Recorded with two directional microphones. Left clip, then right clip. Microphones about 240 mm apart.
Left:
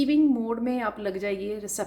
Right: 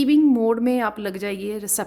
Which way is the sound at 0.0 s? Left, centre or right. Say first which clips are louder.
Right 6 dB; right.